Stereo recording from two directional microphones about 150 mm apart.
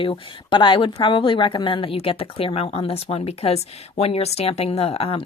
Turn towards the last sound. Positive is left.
turn(degrees=40)  # may be behind; listen again after turning